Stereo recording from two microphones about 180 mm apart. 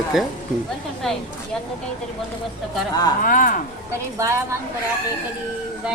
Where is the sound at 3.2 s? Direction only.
50° left (ahead or behind).